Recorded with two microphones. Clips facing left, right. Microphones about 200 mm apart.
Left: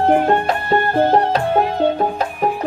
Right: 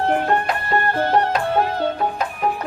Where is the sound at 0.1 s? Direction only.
25° left (ahead or behind).